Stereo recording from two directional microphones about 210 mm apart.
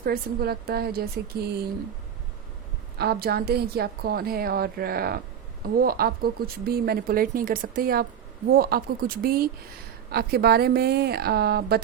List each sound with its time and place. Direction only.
0.0 s a woman's voice: 50° right (ahead or behind)
3.0 s a woman's voice: 50° right (ahead or behind)